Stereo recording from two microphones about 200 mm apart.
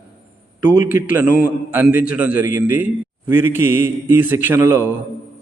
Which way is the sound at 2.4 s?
40° left (ahead or behind).